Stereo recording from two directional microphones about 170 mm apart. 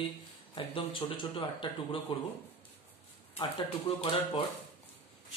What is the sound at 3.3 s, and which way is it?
Speech, 30° left (ahead or behind).